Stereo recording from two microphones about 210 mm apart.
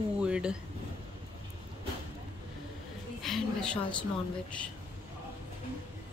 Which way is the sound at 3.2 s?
5° left (ahead or behind).